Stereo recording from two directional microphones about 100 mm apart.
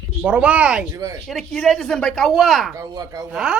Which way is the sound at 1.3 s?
5° left (ahead or behind).